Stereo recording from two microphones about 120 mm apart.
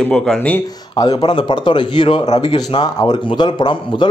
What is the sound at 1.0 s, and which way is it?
A man's voice, 45° left (ahead or behind).